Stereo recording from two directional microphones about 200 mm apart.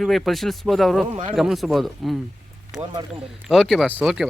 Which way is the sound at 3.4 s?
Centre (ahead or behind).